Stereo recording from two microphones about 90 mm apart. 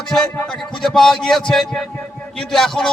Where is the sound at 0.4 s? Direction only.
5° left (ahead or behind).